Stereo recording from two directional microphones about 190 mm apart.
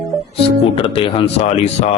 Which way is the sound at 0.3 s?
30° left (ahead or behind).